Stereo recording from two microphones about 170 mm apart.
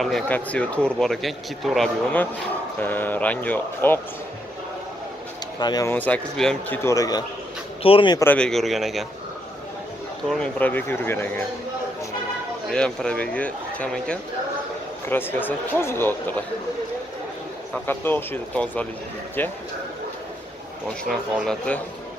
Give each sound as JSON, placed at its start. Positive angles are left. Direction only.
{"t": 0.0, "sound": "speech", "side_deg": 5}
{"t": 5.6, "sound": "a man's voice", "side_deg": 25}
{"t": 5.9, "sound": "speech", "side_deg": 10}
{"t": 6.8, "sound": "a man's voice", "side_deg": 20}
{"t": 8.2, "sound": "speech", "side_deg": 10}
{"t": 10.3, "sound": "speech", "side_deg": 5}
{"t": 12.7, "sound": "speech", "side_deg": 5}
{"t": 17.8, "sound": "speech", "side_deg": 10}
{"t": 21.0, "sound": "speech", "side_deg": 0}